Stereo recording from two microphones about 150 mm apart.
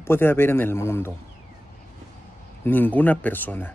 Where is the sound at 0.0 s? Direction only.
15° left (ahead or behind).